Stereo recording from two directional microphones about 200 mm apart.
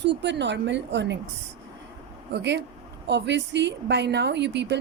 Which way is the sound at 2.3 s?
60° right (ahead or behind).